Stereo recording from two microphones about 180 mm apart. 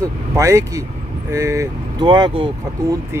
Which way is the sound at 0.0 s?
15° right (ahead or behind).